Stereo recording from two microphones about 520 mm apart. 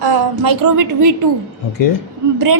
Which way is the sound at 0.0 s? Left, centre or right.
Right.